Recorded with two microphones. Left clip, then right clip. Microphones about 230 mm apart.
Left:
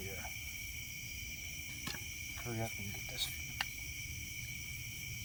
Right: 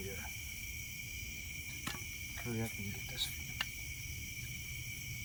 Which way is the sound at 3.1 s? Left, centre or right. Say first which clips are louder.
Even; left.